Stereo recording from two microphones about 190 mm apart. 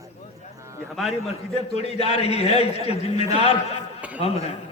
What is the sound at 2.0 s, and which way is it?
Speech, 30° left (ahead or behind).